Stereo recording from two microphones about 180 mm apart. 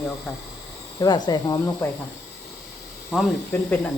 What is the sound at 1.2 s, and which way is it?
Speech, 20° left (ahead or behind).